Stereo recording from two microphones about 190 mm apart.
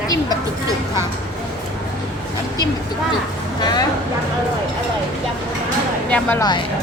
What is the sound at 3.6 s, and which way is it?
Speech, 20° left (ahead or behind).